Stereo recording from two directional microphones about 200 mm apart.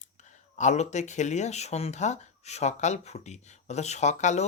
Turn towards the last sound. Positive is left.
turn(degrees=35)  # may be behind; listen again after turning